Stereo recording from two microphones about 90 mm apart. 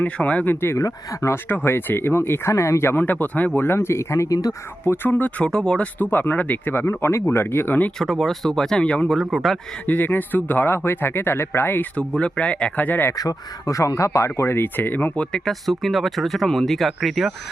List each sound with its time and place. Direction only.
0.0 s speech: 15° left (ahead or behind)
0.8 s speech: 35° left (ahead or behind)
1.5 s speech: 25° left (ahead or behind); by 4.5 s 40° left (ahead or behind)
4.9 s speech: 20° left (ahead or behind)
7.9 s speech: centre (ahead or behind)
9.1 s speech: centre (ahead or behind)
9.8 s speech: 20° left (ahead or behind)
13.1 s speech: 40° left (ahead or behind); by 17.3 s centre (ahead or behind)